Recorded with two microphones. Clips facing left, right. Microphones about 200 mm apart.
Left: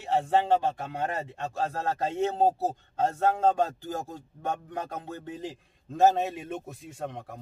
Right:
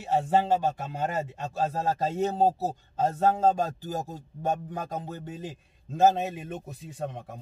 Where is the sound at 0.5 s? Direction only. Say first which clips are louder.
Left 1 dB; 5° right (ahead or behind).